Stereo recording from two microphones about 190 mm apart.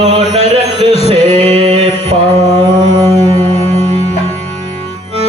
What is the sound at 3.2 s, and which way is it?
Music, 35° left (ahead or behind).